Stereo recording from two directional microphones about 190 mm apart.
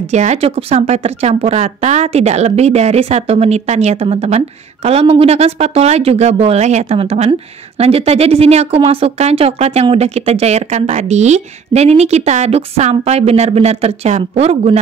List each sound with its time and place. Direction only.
0.1 s speech: 35° right (ahead or behind)